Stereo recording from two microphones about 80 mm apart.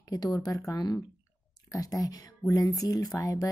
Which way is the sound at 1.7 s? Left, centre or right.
Left.